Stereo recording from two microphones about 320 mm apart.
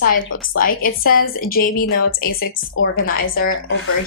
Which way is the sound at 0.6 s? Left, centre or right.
Left.